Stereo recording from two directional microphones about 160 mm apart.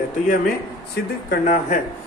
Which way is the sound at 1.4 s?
50° left (ahead or behind).